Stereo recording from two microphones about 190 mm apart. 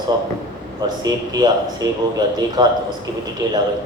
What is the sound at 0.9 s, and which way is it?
A man's voice, 20° right (ahead or behind).